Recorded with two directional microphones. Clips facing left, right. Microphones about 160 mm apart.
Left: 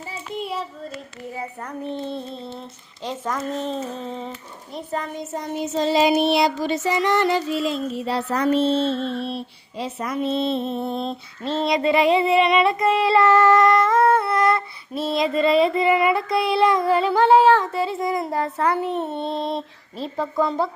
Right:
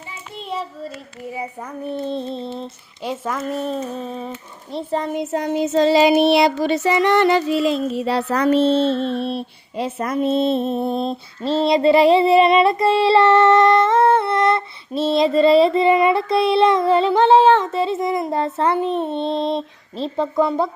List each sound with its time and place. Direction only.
0.3 s child singing: 5° left (ahead or behind)
1.9 s speech: 15° right (ahead or behind)
2.1 s a child's voice: 30° right (ahead or behind)
3.0 s speech: 10° right (ahead or behind)
4.7 s a child's voice: 30° right (ahead or behind)
5.1 s child singing: 65° right (ahead or behind); by 20.7 s 15° right (ahead or behind)